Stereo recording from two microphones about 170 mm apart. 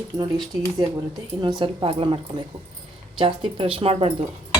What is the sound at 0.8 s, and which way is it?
A woman's voice, 25° right (ahead or behind).